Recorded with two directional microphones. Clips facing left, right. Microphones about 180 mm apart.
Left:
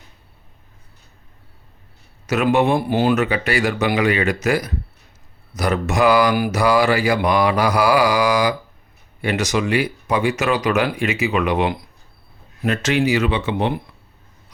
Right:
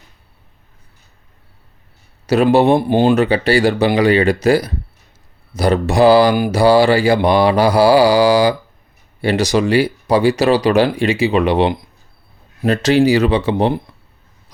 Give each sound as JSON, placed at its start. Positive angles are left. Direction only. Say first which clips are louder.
{"t": 2.2, "sound": "mantra", "louder": "right 5 dB", "side_deg": -35}